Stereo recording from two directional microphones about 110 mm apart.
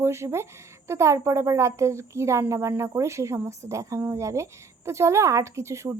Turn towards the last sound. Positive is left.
turn(degrees=-25)  # may be behind; listen again after turning